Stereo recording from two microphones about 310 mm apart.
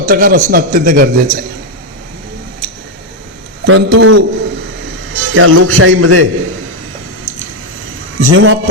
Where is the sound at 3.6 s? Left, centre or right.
Right.